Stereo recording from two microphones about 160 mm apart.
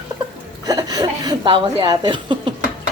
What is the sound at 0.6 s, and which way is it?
A woman's voice, 25° right (ahead or behind).